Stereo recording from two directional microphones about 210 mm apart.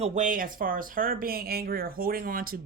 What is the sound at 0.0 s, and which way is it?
Speech, 35° right (ahead or behind).